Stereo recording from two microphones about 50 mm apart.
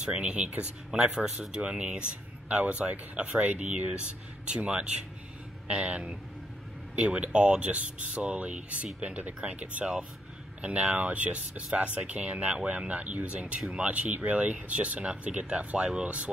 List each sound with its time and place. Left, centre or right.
0.1 s speech: right
0.9 s speech: centre
15.8 s speech: centre